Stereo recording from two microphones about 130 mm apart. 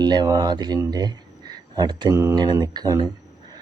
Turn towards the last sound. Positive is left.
turn(degrees=-30)  # may be behind; listen again after turning